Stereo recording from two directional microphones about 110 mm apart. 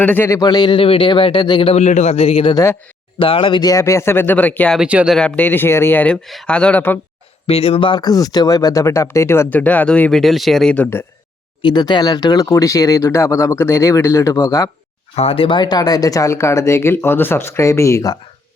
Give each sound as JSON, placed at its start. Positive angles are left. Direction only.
{"t": 0.0, "sound": "speech", "side_deg": 15}
{"t": 0.3, "sound": "speech", "side_deg": 40}
{"t": 1.6, "sound": "a man's voice", "side_deg": 85}
{"t": 3.7, "sound": "speech", "side_deg": 25}
{"t": 4.8, "sound": "speech", "side_deg": -10}
{"t": 5.4, "sound": "speech", "side_deg": 20}
{"t": 6.2, "sound": "speech", "side_deg": 5}
{"t": 7.4, "sound": "speech", "side_deg": 60}
{"t": 11.6, "sound": "speech", "side_deg": 45}
{"t": 15.1, "sound": "speech", "side_deg": 65}